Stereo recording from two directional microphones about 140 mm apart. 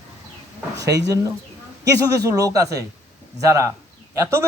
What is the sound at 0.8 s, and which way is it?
A man's voice, 25° right (ahead or behind).